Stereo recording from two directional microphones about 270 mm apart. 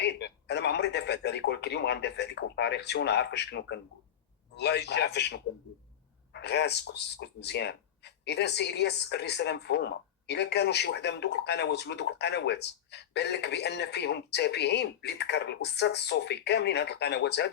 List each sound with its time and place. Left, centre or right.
0.0 s speech: left